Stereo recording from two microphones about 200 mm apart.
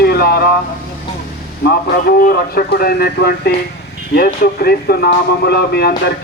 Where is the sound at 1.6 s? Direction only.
50° left (ahead or behind).